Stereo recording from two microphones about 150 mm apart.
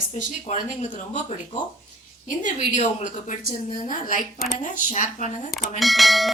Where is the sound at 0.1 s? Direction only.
50° left (ahead or behind).